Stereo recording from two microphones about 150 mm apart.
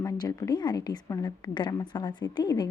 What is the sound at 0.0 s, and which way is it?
A woman's voice, 25° left (ahead or behind).